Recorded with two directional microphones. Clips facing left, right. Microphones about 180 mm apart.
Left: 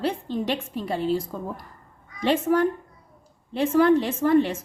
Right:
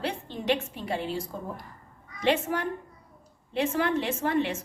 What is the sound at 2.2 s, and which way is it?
A woman's voice, 40° left (ahead or behind).